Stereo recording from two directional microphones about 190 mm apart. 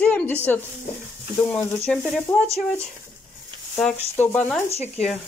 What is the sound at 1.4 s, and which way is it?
Speech, 5° left (ahead or behind).